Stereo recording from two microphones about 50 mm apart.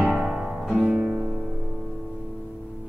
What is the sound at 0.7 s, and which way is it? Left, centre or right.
Music, centre.